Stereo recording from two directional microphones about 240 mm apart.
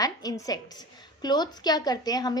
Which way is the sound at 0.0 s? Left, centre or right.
Centre.